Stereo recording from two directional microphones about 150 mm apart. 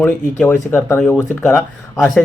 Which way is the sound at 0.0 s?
15° left (ahead or behind).